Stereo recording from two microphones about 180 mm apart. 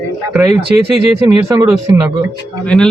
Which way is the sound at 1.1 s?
20° right (ahead or behind).